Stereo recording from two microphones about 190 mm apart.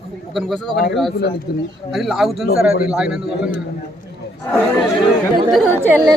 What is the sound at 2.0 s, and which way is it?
Speech, centre (ahead or behind).